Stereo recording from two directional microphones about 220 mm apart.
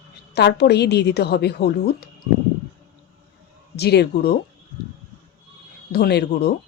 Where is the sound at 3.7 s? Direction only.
50° left (ahead or behind).